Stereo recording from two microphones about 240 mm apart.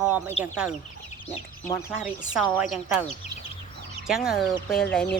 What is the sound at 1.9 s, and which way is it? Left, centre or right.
Speech, centre.